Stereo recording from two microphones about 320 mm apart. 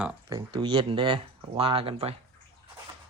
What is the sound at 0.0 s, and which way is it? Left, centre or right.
Speech, centre.